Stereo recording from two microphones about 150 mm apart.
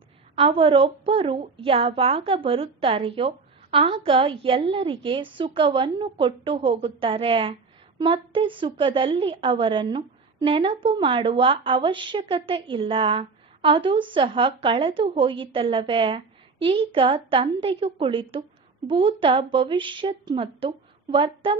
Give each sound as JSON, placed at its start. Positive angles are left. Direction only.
{"t": 0.4, "sound": "a woman's voice", "side_deg": -35}